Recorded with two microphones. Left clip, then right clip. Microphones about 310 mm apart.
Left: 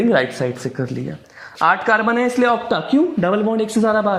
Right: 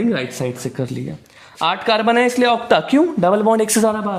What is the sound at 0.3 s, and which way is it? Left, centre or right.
Speech, centre.